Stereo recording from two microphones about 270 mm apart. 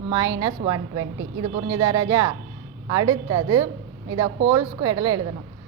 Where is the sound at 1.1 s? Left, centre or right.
Right.